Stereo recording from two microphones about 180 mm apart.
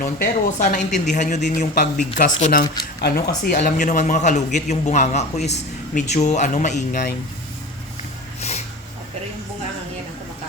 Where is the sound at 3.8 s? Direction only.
45° left (ahead or behind).